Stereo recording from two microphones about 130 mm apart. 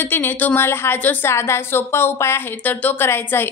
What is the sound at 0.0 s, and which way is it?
A woman's voice, 15° left (ahead or behind).